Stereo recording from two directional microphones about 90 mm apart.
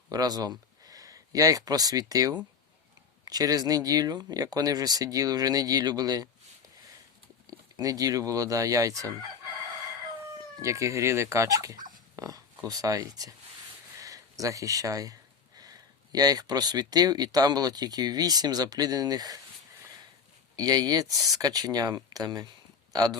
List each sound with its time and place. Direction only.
0.1 s speech: 45° right (ahead or behind)
7.8 s speech: 40° right (ahead or behind)
10.6 s speech: 35° right (ahead or behind)
20.6 s speech: 45° right (ahead or behind)